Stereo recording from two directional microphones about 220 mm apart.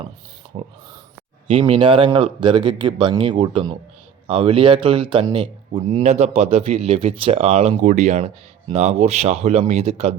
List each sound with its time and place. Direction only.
0.5 s speech: 25° right (ahead or behind)